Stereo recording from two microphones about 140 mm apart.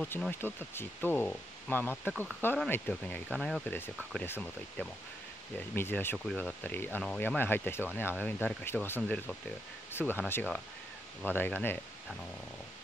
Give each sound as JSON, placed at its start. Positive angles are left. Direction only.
{"t": 0.0, "sound": "speech", "side_deg": 10}
{"t": 3.3, "sound": "speech", "side_deg": 0}
{"t": 4.2, "sound": "speech", "side_deg": 10}
{"t": 6.1, "sound": "speech", "side_deg": 5}